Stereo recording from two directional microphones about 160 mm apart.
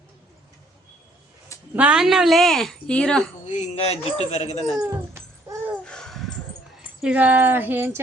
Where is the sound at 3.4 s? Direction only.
50° left (ahead or behind).